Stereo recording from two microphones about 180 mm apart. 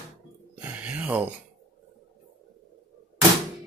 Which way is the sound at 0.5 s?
5° right (ahead or behind).